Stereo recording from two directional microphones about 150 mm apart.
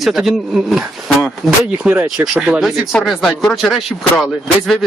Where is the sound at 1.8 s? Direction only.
15° right (ahead or behind).